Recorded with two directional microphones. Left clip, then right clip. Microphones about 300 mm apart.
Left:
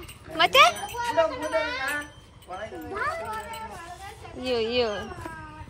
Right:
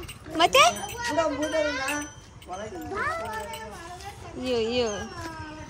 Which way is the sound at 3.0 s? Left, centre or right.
Centre.